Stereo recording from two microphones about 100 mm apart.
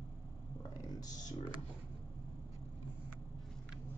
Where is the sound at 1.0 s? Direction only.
40° left (ahead or behind).